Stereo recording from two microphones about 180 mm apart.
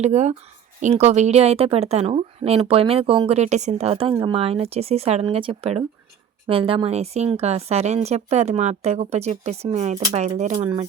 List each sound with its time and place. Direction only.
0.0 s a woman's voice: 40° right (ahead or behind)